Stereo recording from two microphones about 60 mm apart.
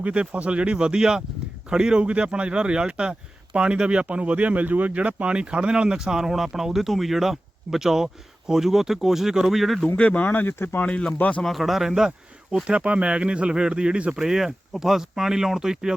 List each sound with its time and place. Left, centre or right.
0.0 s speech: right; by 9.8 s centre
10.0 s speech: left
10.8 s speech: left
11.4 s speech: centre